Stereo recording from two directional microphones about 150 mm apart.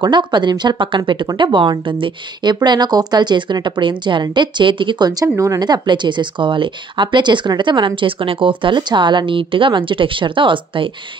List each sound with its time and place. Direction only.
0.0 s speech: 30° right (ahead or behind)